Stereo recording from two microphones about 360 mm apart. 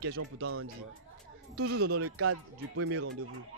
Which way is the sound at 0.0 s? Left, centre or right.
Right.